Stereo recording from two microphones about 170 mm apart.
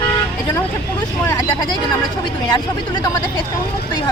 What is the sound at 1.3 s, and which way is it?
Speech, 20° left (ahead or behind).